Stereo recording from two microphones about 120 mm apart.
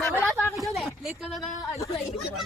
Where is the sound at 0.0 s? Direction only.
5° left (ahead or behind).